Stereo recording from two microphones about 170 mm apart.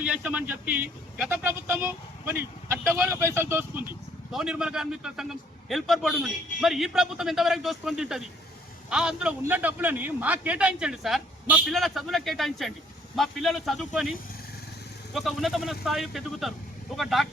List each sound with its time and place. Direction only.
0.0 s a man's voice: 10° right (ahead or behind)
4.3 s a man's voice: 5° right (ahead or behind)
15.1 s a man's voice: centre (ahead or behind)